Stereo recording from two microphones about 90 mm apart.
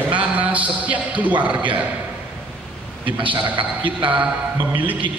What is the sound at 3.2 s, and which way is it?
Speech, 70° right (ahead or behind).